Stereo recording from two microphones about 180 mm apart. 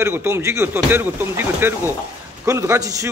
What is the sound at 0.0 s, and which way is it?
A man's voice, 15° right (ahead or behind).